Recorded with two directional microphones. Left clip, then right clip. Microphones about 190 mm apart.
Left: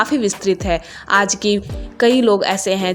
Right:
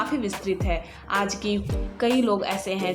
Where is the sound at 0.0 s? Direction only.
35° left (ahead or behind).